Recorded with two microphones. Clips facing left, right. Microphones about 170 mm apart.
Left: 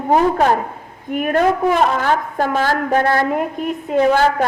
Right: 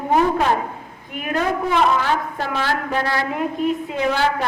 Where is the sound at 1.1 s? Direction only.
50° left (ahead or behind).